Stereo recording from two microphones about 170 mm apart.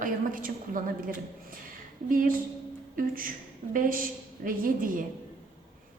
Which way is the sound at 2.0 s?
55° right (ahead or behind).